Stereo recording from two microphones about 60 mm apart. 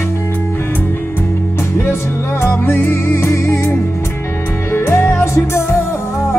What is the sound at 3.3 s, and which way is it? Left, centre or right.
Music, left.